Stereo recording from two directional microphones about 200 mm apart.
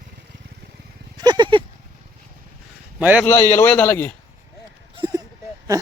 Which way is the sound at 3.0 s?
10° right (ahead or behind).